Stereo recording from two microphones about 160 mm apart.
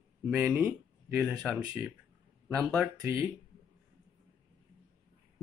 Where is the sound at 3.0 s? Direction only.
15° right (ahead or behind).